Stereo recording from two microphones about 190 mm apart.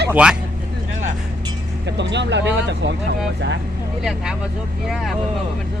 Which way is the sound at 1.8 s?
65° right (ahead or behind).